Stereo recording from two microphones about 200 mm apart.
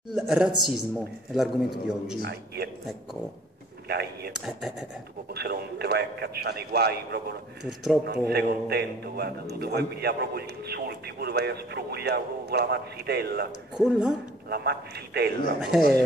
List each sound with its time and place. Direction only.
0.1 s a man's voice: 5° right (ahead or behind)
2.2 s a man's voice: 55° right (ahead or behind)
3.8 s a sound: 55° right (ahead or behind)
4.3 s a man's voice: centre (ahead or behind)
5.3 s a man's voice: 55° right (ahead or behind)
7.6 s a man's voice: centre (ahead or behind)
8.3 s a man's voice: 55° right (ahead or behind)
13.7 s a man's voice: 5° right (ahead or behind)
14.5 s a man's voice: 55° right (ahead or behind)